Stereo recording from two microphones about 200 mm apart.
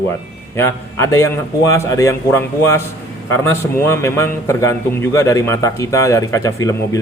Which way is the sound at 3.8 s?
15° left (ahead or behind).